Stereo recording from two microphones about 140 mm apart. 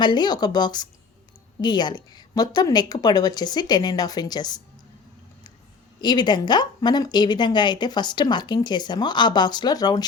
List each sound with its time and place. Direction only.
0.0 s a woman's voice: 30° left (ahead or behind)
6.0 s speech: 30° left (ahead or behind)